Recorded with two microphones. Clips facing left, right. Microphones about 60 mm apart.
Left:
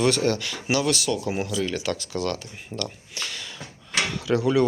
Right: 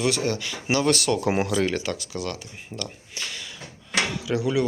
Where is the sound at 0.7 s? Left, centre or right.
Right.